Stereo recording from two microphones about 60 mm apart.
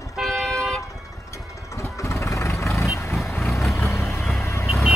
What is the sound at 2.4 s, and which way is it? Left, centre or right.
Vehicle, left.